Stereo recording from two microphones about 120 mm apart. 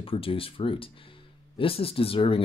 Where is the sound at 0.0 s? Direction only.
50° left (ahead or behind).